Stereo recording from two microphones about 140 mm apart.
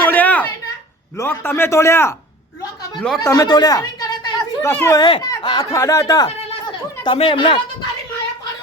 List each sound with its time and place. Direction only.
0.0 s a sound: 10° left (ahead or behind)
1.1 s a man's voice: 15° left (ahead or behind)
3.2 s a sound: 25° left (ahead or behind)
4.7 s a man's voice: 15° left (ahead or behind)
4.9 s speech: 35° left (ahead or behind)
7.0 s speech: 40° left (ahead or behind)